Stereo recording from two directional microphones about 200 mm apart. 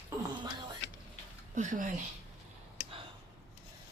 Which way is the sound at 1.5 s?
40° right (ahead or behind).